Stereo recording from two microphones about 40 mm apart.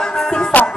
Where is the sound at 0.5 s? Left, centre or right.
Left.